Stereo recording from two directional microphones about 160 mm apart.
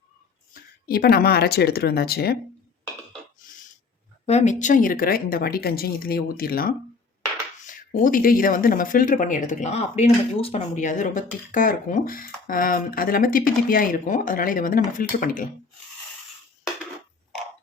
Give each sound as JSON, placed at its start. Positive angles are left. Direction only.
{"t": 0.9, "sound": "speech", "side_deg": 70}
{"t": 4.3, "sound": "speech", "side_deg": 45}
{"t": 7.7, "sound": "speech", "side_deg": 55}